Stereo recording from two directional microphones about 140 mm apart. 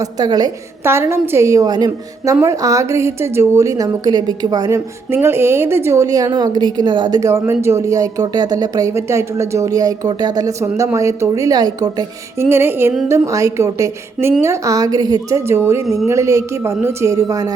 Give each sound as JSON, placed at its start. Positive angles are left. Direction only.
{"t": 0.0, "sound": "a woman's voice", "side_deg": -30}
{"t": 0.9, "sound": "a woman's voice", "side_deg": -15}
{"t": 5.1, "sound": "a woman's voice", "side_deg": -15}
{"t": 12.5, "sound": "music", "side_deg": -15}
{"t": 13.1, "sound": "a woman's voice", "side_deg": -20}